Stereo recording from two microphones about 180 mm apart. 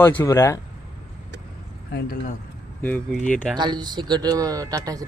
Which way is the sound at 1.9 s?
50° left (ahead or behind).